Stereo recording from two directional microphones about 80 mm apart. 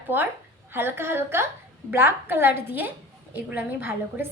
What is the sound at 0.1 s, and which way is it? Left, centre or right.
A woman's voice, right.